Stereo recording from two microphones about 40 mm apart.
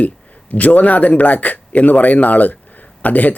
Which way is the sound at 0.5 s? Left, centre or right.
Left.